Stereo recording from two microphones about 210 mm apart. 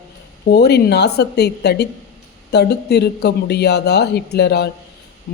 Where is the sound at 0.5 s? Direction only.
50° left (ahead or behind).